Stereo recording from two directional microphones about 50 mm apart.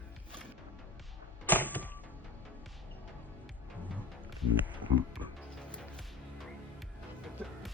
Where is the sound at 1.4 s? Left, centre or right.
Left.